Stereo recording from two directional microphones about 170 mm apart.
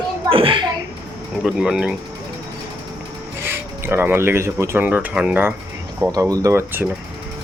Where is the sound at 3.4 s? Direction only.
15° right (ahead or behind).